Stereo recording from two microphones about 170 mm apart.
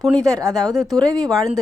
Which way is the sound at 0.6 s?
Centre (ahead or behind).